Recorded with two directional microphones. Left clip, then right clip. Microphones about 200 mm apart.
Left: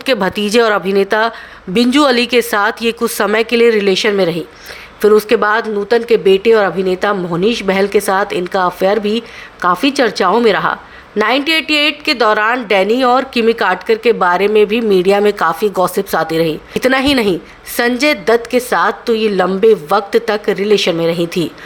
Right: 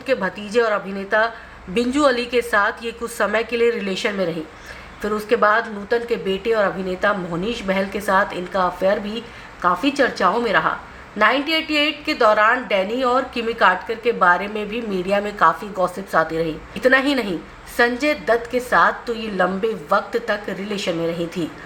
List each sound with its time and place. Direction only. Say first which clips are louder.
0.0 s a woman's voice: left 7 dB; 50° left (ahead or behind)